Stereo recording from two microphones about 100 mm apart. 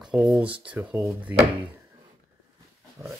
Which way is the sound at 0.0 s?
10° right (ahead or behind).